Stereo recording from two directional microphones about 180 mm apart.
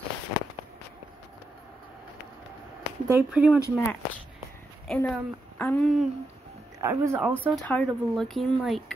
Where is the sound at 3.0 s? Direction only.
10° right (ahead or behind).